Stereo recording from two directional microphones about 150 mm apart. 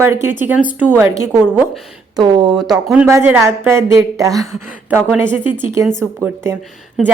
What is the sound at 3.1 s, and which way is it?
A woman's voice, 20° right (ahead or behind).